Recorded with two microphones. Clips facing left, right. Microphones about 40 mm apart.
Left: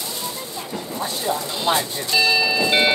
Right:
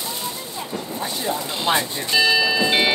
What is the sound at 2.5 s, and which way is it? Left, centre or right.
Music, centre.